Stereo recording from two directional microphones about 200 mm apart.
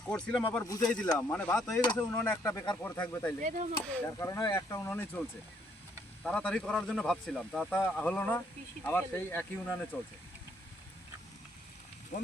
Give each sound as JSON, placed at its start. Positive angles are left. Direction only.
{"t": 0.0, "sound": "speech", "side_deg": 5}
{"t": 0.6, "sound": "speech", "side_deg": 15}
{"t": 3.4, "sound": "speech", "side_deg": -40}
{"t": 3.9, "sound": "speech", "side_deg": 15}
{"t": 6.2, "sound": "speech", "side_deg": 5}
{"t": 12.1, "sound": "speech", "side_deg": 40}